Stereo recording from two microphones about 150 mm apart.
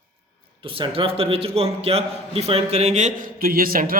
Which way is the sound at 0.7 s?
35° right (ahead or behind).